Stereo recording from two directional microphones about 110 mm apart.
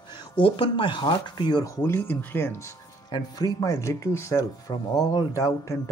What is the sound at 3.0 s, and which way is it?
Speech, 40° left (ahead or behind).